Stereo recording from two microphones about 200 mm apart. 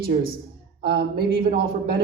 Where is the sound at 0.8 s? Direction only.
50° right (ahead or behind).